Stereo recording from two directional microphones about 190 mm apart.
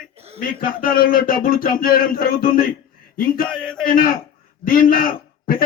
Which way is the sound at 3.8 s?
50° left (ahead or behind).